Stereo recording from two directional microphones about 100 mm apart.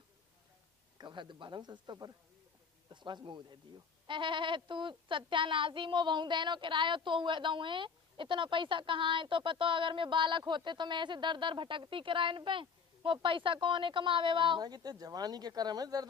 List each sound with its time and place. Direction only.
0.9 s speech: 50° right (ahead or behind)
14.6 s speech: 40° right (ahead or behind)